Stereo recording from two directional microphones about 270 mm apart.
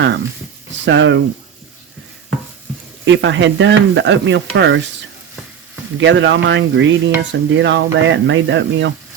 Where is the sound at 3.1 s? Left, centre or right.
Right.